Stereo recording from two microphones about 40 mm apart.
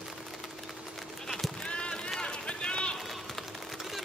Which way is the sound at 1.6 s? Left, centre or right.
Left.